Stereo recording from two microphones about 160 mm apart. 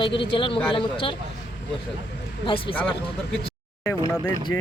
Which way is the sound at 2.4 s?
35° left (ahead or behind).